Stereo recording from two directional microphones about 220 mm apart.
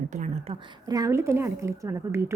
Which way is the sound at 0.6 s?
20° right (ahead or behind).